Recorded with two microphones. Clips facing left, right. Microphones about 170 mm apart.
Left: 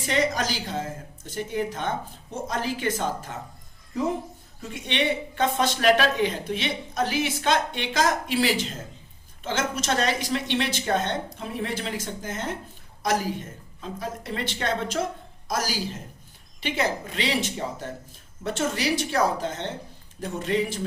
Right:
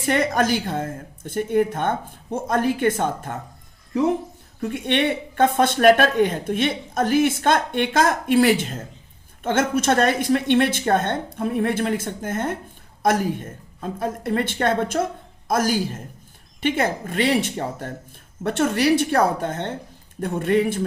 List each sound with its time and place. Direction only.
0.0 s a woman's voice: 55° right (ahead or behind)
4.6 s a woman's voice: 55° right (ahead or behind)